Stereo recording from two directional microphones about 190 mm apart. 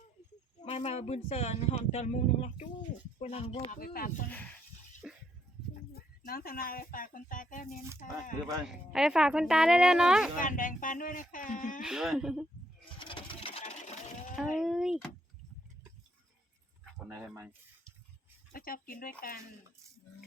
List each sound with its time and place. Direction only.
0.6 s speech: 35° left (ahead or behind)
3.8 s speech: 50° left (ahead or behind)
4.3 s speech: 10° left (ahead or behind)
5.0 s music: centre (ahead or behind)
5.9 s speech: 50° left (ahead or behind)
8.6 s speech: 5° right (ahead or behind)
10.3 s speech: 45° left (ahead or behind)
11.8 s speech: 5° right (ahead or behind)
13.0 s vehicle: 25° left (ahead or behind)
14.3 s speech: centre (ahead or behind)
17.1 s speech: 10° right (ahead or behind)
18.5 s speech: 50° left (ahead or behind)